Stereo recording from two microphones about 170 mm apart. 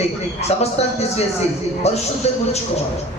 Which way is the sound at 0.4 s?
40° left (ahead or behind).